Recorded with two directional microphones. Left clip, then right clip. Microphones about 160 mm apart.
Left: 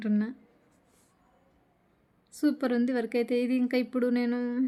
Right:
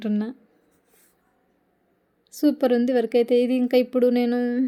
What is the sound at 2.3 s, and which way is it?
Speech, 10° right (ahead or behind).